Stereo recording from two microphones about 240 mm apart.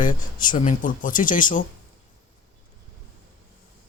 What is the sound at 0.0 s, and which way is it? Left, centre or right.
Speech, left.